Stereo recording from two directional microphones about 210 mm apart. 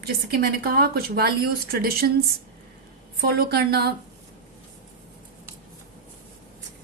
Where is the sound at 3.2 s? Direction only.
50° right (ahead or behind).